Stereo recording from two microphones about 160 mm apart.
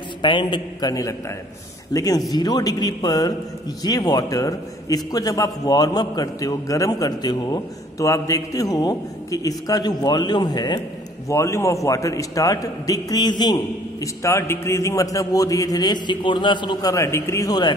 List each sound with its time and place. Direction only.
0.2 s a man's voice: 30° left (ahead or behind)